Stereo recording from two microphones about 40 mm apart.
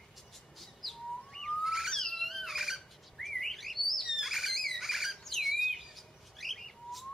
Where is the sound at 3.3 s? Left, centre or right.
Centre.